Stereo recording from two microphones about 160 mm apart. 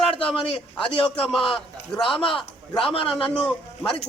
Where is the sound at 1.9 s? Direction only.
Centre (ahead or behind).